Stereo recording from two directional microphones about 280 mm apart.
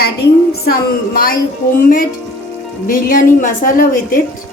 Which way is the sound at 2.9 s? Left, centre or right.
Left.